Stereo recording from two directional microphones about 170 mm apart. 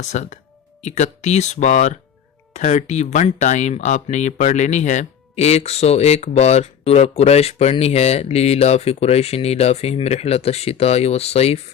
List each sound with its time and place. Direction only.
0.1 s speech: 45° left (ahead or behind)